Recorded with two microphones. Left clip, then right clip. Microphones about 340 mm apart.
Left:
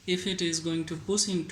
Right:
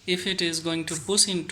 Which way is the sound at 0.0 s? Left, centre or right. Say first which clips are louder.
Right 4 dB; centre.